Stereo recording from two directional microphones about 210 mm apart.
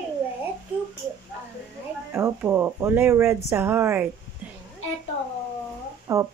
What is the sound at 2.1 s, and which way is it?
Speech, 10° right (ahead or behind).